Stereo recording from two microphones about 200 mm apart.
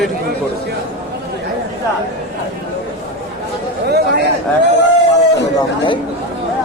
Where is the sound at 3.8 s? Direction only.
50° right (ahead or behind).